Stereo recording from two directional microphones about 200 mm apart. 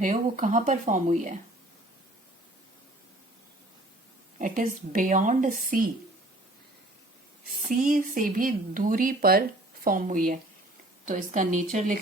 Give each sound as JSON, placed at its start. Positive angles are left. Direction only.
{"t": 0.0, "sound": "speech", "side_deg": -40}
{"t": 4.4, "sound": "speech", "side_deg": -40}
{"t": 7.7, "sound": "speech", "side_deg": -45}